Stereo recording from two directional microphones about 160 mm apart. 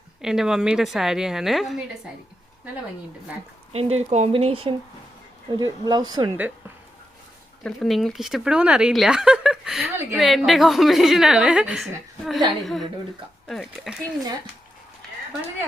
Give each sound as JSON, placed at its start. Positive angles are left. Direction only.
{"t": 0.2, "sound": "speech", "side_deg": -5}
{"t": 3.7, "sound": "speech", "side_deg": -40}
{"t": 7.6, "sound": "speech", "side_deg": 0}